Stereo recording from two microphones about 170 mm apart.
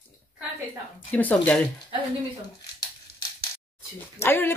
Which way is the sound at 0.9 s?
10° left (ahead or behind).